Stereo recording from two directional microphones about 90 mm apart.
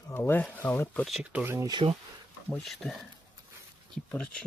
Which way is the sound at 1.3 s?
25° right (ahead or behind).